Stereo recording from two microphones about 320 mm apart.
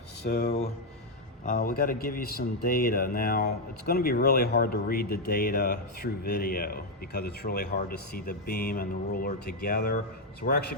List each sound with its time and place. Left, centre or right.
0.3 s speech: left